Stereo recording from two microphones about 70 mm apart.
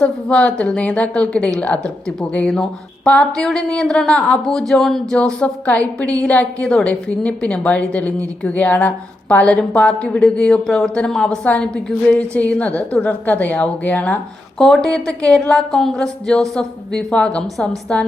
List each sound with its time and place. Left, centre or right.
0.0 s speech: centre
5.1 s a woman's voice: centre
14.6 s speech: centre